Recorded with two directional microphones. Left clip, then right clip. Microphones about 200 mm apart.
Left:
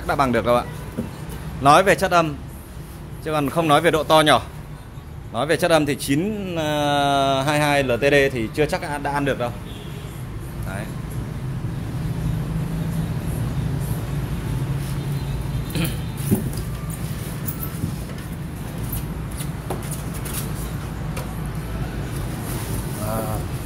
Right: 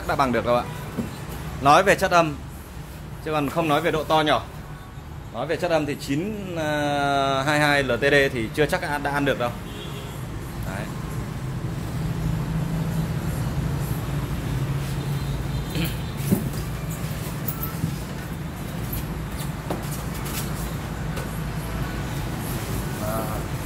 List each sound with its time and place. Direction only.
0.0 s speech: 15° left (ahead or behind)
3.3 s speech: 15° left (ahead or behind); by 6.2 s 30° left (ahead or behind)
6.5 s speech: 15° left (ahead or behind)
15.8 s a sound: 20° left (ahead or behind)